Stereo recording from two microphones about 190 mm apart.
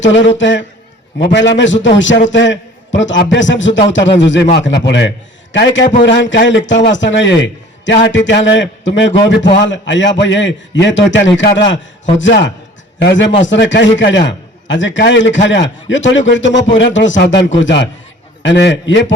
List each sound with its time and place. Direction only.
0.0 s a man's voice: 75° left (ahead or behind)